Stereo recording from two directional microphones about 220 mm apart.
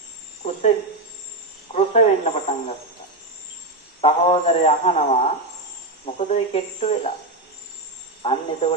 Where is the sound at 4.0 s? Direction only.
25° left (ahead or behind).